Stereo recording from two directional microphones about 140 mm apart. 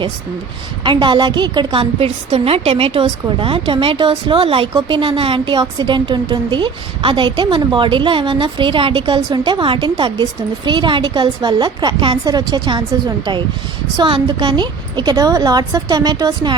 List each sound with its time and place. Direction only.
0.9 s a woman's voice: 35° right (ahead or behind)